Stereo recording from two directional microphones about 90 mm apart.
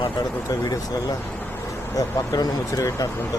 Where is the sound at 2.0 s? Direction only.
45° left (ahead or behind).